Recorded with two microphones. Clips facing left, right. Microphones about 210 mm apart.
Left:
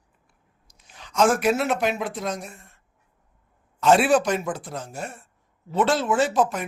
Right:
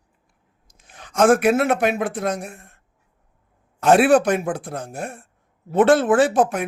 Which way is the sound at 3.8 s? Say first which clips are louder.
Right 4 dB; 55° right (ahead or behind).